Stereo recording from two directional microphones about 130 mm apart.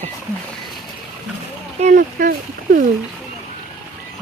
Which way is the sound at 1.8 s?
80° right.